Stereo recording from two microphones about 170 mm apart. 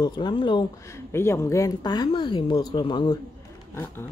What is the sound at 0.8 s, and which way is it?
Speech, 15° left (ahead or behind).